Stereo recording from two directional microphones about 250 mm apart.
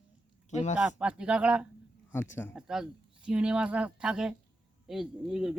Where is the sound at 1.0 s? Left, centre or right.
Centre.